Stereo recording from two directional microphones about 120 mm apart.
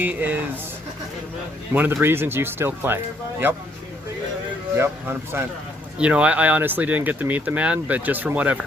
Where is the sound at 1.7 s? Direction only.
15° right (ahead or behind).